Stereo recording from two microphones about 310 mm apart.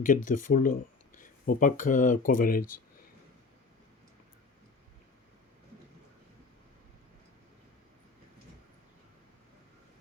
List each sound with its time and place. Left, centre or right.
0.3 s speech: left